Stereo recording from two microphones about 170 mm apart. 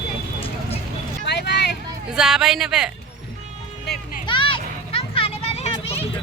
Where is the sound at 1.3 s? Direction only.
85° left.